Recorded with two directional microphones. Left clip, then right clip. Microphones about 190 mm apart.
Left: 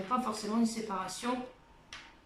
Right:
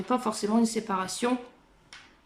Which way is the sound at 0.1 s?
50° right (ahead or behind).